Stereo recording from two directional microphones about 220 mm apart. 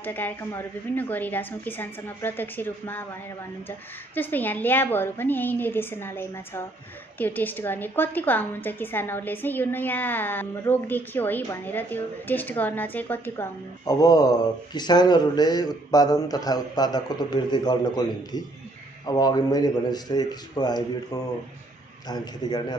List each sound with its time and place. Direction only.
0.0 s a woman's voice: 10° left (ahead or behind)